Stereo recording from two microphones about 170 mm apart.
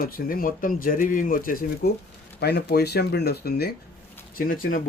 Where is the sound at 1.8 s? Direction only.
70° left (ahead or behind).